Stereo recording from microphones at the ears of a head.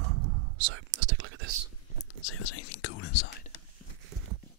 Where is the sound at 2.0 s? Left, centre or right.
Left.